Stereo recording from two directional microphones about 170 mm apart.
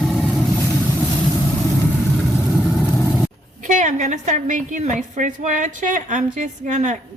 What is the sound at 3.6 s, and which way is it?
A woman's voice, 50° right (ahead or behind).